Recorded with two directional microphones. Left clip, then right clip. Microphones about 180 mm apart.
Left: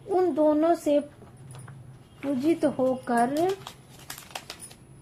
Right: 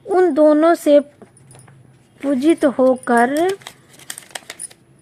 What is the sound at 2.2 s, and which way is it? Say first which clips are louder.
Speech: right 10 dB; 45° right (ahead or behind).